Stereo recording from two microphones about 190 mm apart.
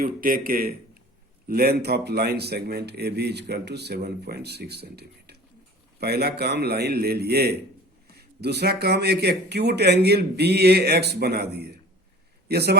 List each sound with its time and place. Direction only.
0.0 s a man's voice: 50° right (ahead or behind)